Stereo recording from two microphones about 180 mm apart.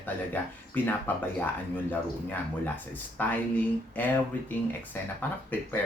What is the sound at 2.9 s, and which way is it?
Speech, 10° left (ahead or behind).